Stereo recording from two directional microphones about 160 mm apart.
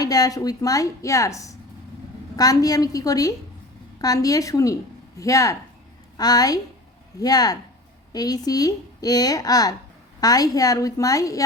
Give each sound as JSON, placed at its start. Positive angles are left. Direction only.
{"t": 0.0, "sound": "a woman's voice", "side_deg": 25}